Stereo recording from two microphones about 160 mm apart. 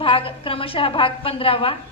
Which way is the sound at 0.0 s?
35° left (ahead or behind).